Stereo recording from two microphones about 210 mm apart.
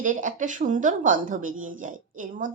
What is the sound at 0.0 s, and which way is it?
Speech, 40° right (ahead or behind).